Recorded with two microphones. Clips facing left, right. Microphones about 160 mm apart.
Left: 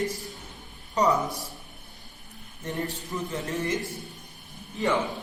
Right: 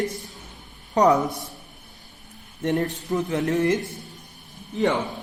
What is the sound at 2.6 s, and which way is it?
Speech, 75° right (ahead or behind).